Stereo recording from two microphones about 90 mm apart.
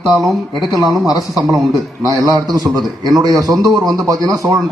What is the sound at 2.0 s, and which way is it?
A man's voice, 40° right (ahead or behind).